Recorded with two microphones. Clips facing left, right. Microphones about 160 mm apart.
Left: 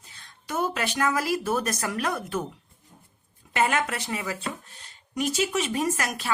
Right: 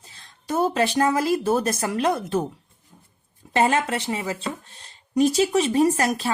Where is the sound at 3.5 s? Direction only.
30° right (ahead or behind).